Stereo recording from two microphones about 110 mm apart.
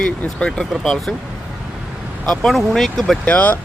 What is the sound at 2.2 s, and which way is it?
Speech, centre (ahead or behind).